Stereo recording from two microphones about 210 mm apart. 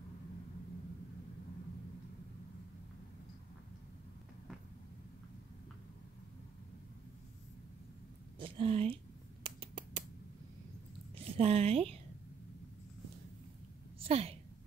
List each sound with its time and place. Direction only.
8.4 s scissors: 25° right (ahead or behind)
11.3 s speech: 30° right (ahead or behind)
13.9 s a sound: 30° right (ahead or behind)